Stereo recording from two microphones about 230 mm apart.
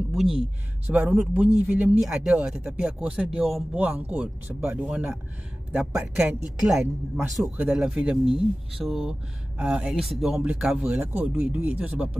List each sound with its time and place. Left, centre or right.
0.8 s speech: centre